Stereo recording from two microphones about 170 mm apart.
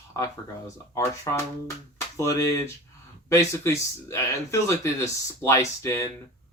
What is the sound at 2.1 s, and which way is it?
Speech, 15° left (ahead or behind).